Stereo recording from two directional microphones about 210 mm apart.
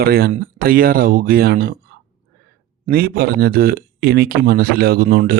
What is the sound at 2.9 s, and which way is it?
Speech, 45° right (ahead or behind).